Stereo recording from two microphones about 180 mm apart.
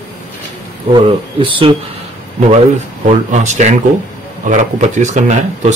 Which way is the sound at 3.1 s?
40° right (ahead or behind).